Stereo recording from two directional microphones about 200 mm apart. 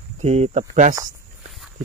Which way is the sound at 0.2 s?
35° right (ahead or behind).